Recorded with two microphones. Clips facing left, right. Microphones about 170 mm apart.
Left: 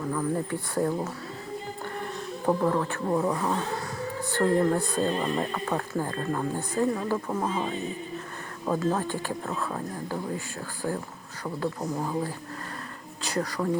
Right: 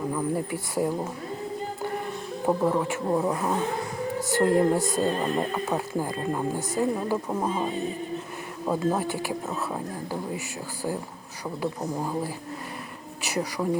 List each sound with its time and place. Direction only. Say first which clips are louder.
0.1 s speech: right 1 dB; 15° right (ahead or behind)
2.5 s speech: right 1 dB; 10° right (ahead or behind)